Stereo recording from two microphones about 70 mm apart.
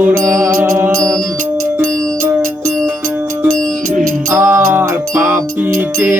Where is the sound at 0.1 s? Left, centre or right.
Right.